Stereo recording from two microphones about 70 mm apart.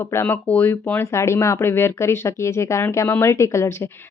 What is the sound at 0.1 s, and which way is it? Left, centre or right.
Speech, left.